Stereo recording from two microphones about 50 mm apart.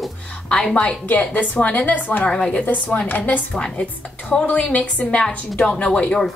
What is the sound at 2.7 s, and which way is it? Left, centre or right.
Speech, left.